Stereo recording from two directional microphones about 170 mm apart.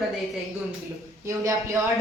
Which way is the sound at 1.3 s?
20° right (ahead or behind).